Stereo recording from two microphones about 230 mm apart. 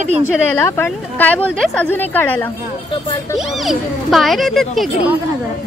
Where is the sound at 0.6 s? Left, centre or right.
Centre.